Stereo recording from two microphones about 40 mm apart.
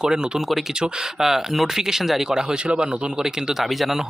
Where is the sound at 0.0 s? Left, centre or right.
Centre.